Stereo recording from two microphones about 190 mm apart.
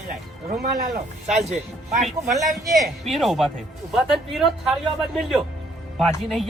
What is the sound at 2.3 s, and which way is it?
A man's voice, centre (ahead or behind).